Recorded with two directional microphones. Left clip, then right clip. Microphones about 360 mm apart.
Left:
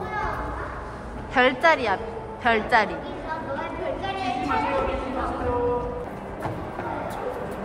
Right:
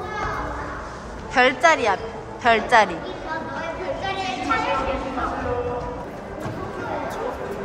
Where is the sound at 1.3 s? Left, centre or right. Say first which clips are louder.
Right 2 dB; centre.